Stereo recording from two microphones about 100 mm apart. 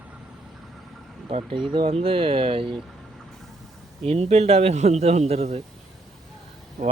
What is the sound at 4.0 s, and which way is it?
Speech, 90° right.